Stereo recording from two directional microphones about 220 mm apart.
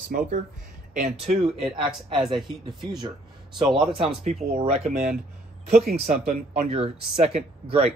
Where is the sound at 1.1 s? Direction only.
25° right (ahead or behind).